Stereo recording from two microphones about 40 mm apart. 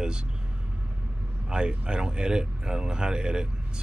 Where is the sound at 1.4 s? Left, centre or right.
Right.